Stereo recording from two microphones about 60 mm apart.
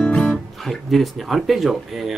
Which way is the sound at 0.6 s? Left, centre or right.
Centre.